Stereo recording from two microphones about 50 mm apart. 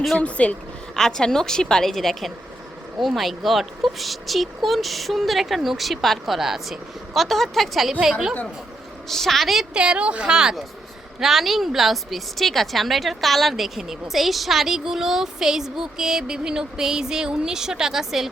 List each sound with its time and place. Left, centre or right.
0.2 s speech: left
0.9 s a woman's voice: centre
9.0 s speech: centre
9.7 s speech: centre
11.2 s a woman's voice: centre